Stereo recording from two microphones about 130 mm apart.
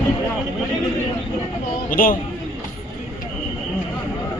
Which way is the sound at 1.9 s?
90° left.